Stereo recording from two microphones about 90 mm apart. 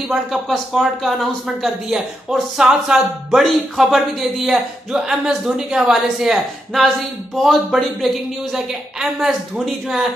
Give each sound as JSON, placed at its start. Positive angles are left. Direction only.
{"t": 0.1, "sound": "speech", "side_deg": 0}